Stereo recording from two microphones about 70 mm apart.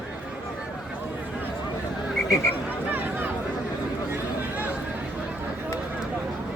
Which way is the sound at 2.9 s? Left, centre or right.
Right.